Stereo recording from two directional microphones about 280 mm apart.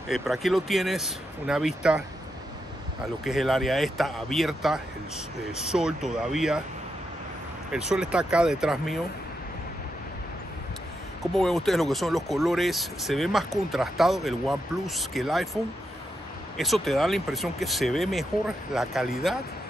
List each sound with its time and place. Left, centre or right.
0.1 s speech: centre
3.3 s speech: centre
7.9 s speech: centre
11.3 s speech: centre